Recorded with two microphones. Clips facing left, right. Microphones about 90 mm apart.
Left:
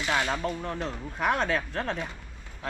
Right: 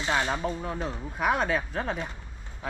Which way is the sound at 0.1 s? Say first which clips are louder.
Right 1 dB; 10° right (ahead or behind).